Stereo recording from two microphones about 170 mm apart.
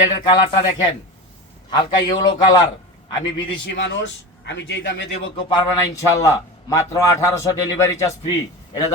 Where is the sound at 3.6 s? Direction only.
90° left.